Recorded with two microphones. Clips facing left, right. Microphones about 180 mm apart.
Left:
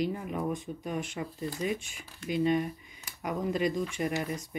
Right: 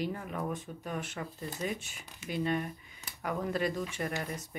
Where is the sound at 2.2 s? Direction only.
15° left (ahead or behind).